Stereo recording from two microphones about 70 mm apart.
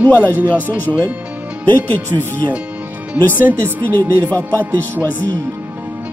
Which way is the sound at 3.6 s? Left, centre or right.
Left.